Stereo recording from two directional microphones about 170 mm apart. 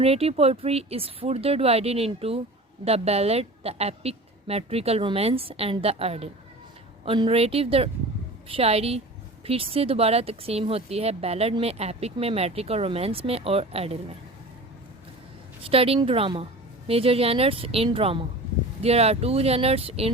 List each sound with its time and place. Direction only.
0.0 s speech: 35° right (ahead or behind)
15.7 s speech: 35° right (ahead or behind)